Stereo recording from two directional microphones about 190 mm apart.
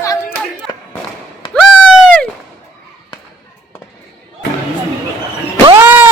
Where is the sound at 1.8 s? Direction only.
5° left (ahead or behind).